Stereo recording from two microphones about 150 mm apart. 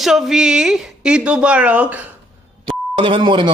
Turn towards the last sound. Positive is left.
turn(degrees=-30)  # may be behind; listen again after turning